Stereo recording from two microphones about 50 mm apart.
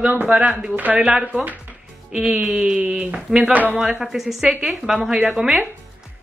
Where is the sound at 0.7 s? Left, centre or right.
Right.